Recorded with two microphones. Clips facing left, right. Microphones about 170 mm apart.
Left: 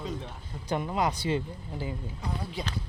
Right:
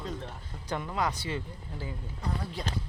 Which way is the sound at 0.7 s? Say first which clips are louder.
Left 3 dB; 20° left (ahead or behind).